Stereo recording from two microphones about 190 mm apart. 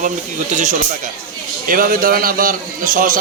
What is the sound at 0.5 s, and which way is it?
A man's voice, 40° right (ahead or behind).